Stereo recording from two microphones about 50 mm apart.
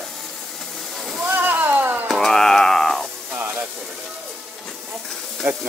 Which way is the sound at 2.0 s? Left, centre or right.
Centre.